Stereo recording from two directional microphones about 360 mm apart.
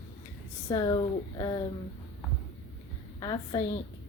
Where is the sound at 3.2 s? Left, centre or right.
Centre.